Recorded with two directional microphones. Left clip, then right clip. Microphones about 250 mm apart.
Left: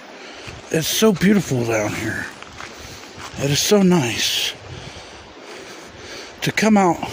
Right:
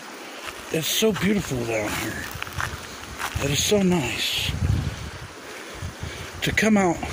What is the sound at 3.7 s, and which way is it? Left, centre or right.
Speech, left.